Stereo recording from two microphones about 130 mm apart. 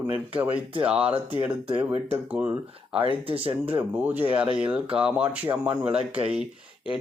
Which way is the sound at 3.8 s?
15° right (ahead or behind).